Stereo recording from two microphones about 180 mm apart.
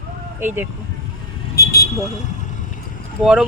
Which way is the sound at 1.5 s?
60° left (ahead or behind).